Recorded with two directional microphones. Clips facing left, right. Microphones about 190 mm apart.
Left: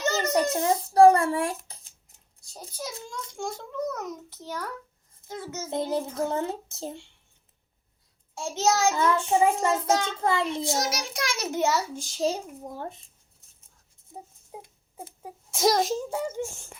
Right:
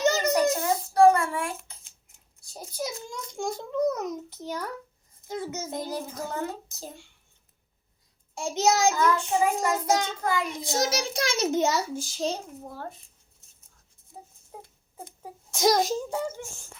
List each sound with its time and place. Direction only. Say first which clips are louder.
0.0 s a sound: right 3 dB; 15° right (ahead or behind)
0.3 s a sound: even; 30° left (ahead or behind)
2.5 s a child's voice: right 4 dB; 10° right (ahead or behind)
5.7 s a child's voice: left 10 dB; 25° left (ahead or behind)
8.4 s a child's voice: right 1 dB; 15° right (ahead or behind)
8.9 s a child's voice: left 1 dB; 25° left (ahead or behind)
9.8 s a child's voice: even; 15° right (ahead or behind)
10.2 s a child's voice: left 2 dB; 25° left (ahead or behind)
10.6 s a child's voice: right 1 dB; 25° right (ahead or behind)
11.9 s a child's voice: left 3 dB; centre (ahead or behind)
12.3 s speech: left 1 dB; 15° left (ahead or behind)
14.1 s a sound: left 2 dB; 20° left (ahead or behind)